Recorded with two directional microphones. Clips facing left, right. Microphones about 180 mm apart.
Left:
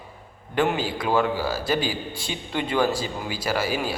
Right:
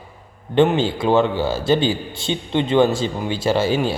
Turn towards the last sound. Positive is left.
turn(degrees=-25)  # may be behind; listen again after turning